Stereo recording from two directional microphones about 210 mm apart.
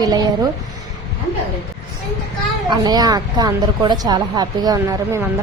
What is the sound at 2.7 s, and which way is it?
A woman's voice, 20° right (ahead or behind).